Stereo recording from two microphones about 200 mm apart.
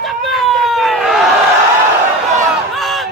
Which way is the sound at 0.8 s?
Centre (ahead or behind).